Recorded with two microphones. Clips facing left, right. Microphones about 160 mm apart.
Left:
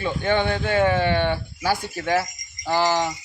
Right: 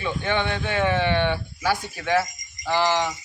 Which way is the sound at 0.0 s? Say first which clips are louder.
Left 3 dB; 40° left (ahead or behind).